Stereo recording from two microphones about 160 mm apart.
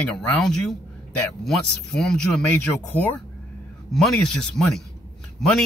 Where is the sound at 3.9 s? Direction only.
Centre (ahead or behind).